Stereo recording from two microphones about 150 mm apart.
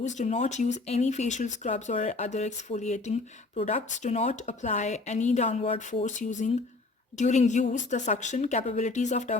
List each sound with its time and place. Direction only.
0.0 s speech: 55° left (ahead or behind)
6.1 s speech: 55° left (ahead or behind)